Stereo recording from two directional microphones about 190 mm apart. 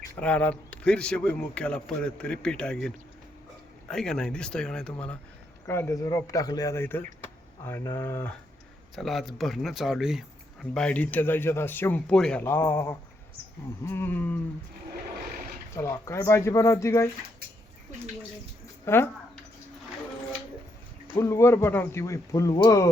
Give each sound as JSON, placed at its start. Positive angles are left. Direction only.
{"t": 0.2, "sound": "speech", "side_deg": 10}
{"t": 15.7, "sound": "speech", "side_deg": 15}
{"t": 18.9, "sound": "speech", "side_deg": 10}
{"t": 21.2, "sound": "speech", "side_deg": 15}